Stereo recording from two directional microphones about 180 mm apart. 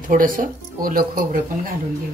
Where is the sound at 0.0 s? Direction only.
50° right (ahead or behind).